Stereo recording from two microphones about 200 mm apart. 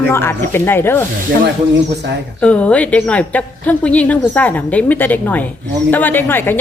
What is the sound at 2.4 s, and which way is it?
A woman's voice, 5° left (ahead or behind).